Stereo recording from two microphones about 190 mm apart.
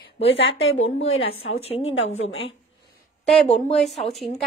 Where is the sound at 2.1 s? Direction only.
85° left.